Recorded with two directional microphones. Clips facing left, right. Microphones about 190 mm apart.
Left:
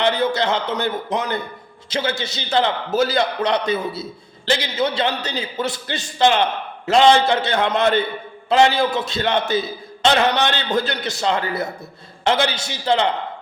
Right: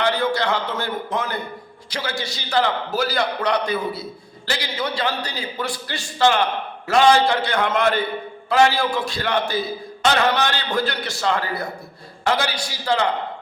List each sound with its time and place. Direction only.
0.0 s a man's voice: 20° left (ahead or behind)